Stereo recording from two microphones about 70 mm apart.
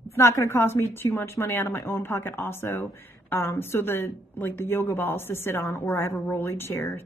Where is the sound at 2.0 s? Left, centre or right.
Left.